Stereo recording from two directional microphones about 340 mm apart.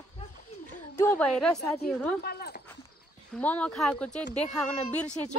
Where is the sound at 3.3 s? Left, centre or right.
Centre.